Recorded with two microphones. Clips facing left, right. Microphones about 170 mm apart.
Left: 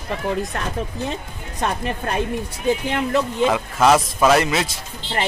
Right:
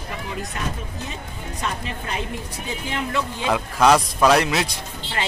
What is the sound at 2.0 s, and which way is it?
Speech, 55° left (ahead or behind).